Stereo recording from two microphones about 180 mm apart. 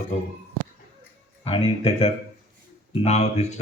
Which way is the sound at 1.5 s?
30° left (ahead or behind).